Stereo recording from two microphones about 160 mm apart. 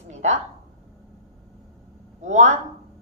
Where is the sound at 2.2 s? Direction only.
45° right (ahead or behind).